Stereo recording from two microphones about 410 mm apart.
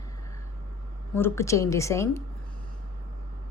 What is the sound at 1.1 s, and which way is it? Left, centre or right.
Speech, centre.